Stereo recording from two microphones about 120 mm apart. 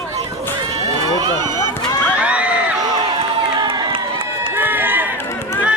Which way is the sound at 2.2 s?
10° right (ahead or behind).